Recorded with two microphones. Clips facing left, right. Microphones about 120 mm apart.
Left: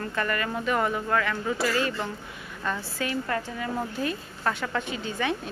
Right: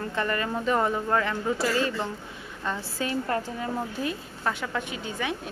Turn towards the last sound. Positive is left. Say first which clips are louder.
# left 3 dB
turn(degrees=-10)  # may be behind; listen again after turning